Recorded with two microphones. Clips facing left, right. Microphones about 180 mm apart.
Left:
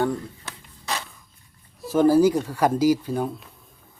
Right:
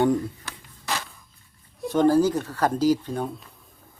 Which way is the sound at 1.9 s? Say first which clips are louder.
Left 2 dB; 10° left (ahead or behind).